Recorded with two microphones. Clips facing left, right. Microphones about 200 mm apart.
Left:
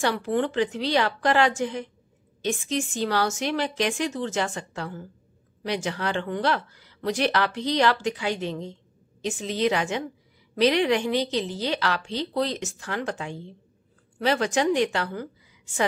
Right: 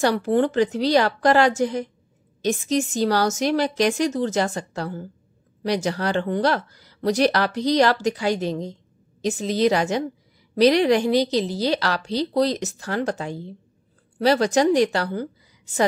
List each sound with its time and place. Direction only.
0.0 s a woman's voice: 40° right (ahead or behind)